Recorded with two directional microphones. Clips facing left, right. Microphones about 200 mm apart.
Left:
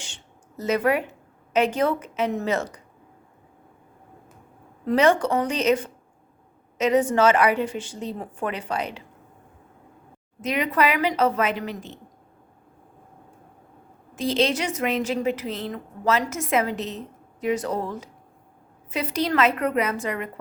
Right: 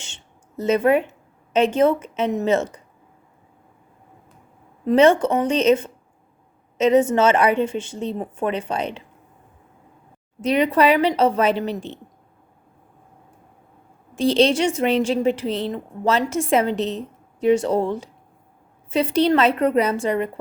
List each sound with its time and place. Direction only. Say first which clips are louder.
0.0 s a sound: left 1 dB; 25° right (ahead or behind)
1.5 s a woman's voice: right 5 dB; 25° right (ahead or behind)
4.9 s a woman's voice: right 4 dB; 25° right (ahead or behind)
10.4 s a woman's voice: right 6 dB; 30° right (ahead or behind)
14.2 s a woman's voice: right 6 dB; 30° right (ahead or behind)